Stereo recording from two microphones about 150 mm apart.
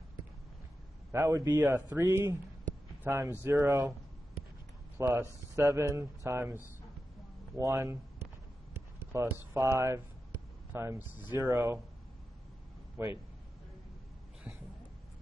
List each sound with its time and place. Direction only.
1.1 s speech: 15° right (ahead or behind)
4.9 s speech: 15° right (ahead or behind)
9.0 s speech: 15° right (ahead or behind)
12.9 s a man's voice: 15° right (ahead or behind)